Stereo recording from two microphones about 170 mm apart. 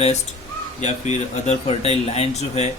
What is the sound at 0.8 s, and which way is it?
Speech, 40° left (ahead or behind).